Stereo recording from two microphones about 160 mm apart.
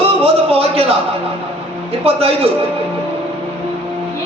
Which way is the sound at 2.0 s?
35° right (ahead or behind).